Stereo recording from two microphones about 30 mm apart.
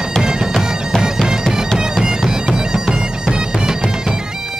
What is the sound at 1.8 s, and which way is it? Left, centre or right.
Bagpipes, right.